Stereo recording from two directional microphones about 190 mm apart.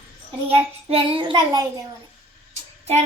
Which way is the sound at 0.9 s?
30° right (ahead or behind).